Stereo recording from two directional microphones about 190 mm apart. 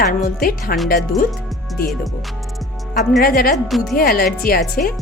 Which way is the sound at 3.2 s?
50° left (ahead or behind).